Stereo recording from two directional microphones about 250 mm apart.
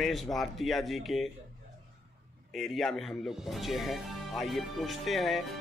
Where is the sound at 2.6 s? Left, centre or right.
Centre.